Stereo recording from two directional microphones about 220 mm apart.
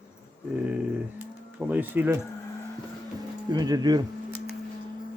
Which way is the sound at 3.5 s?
20° right (ahead or behind).